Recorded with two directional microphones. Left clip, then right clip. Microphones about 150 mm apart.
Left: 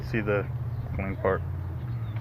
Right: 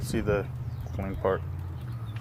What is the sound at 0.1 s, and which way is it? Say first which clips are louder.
Speech: left 1 dB; 20° right (ahead or behind).